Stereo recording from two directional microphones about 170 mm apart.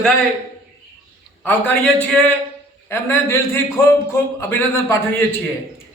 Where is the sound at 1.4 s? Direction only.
10° left (ahead or behind).